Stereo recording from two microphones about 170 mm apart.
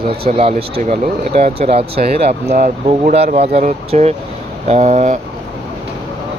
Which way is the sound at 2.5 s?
50° right (ahead or behind).